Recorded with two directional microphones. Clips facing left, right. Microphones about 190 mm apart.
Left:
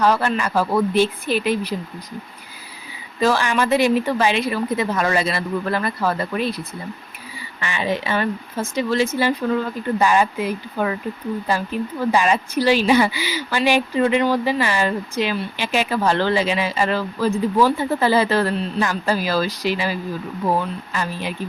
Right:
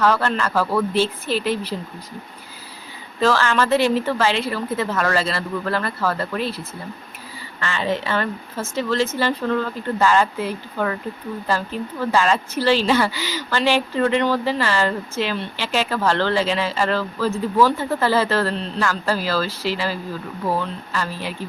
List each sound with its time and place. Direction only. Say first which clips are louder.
0.0 s speech: left 1 dB; 15° left (ahead or behind)
3.2 s speech: even; 15° left (ahead or behind)